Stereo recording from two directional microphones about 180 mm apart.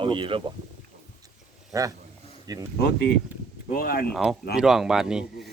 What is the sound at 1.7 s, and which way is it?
Speech, 20° right (ahead or behind).